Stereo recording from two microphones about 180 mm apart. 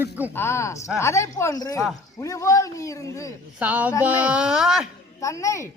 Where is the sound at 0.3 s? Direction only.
15° left (ahead or behind).